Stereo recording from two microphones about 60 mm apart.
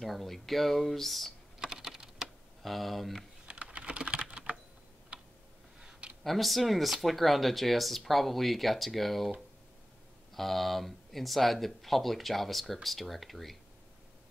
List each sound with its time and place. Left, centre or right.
0.0 s speech: centre
1.6 s typing: centre
2.6 s speech: centre
3.4 s typing: centre
6.2 s speech: centre
10.3 s speech: centre